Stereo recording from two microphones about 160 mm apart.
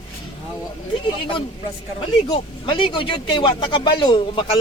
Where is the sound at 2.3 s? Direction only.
30° left (ahead or behind).